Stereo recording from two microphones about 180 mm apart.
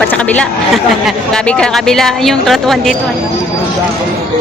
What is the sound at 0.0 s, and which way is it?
Speech, 5° left (ahead or behind).